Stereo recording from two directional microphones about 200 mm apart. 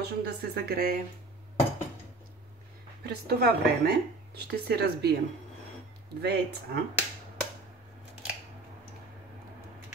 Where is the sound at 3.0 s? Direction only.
50° right (ahead or behind).